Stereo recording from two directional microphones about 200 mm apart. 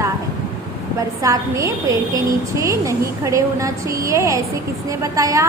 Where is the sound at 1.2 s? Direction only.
15° right (ahead or behind).